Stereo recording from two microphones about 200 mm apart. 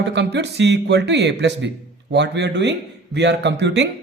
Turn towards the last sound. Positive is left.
turn(degrees=-60)  # may be behind; listen again after turning